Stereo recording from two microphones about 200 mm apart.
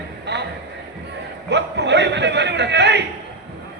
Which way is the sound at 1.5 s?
60° right (ahead or behind).